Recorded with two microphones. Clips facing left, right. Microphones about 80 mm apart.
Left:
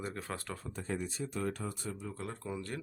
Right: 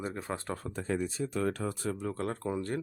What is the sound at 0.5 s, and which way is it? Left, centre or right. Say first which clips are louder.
Speech: right 6 dB; right.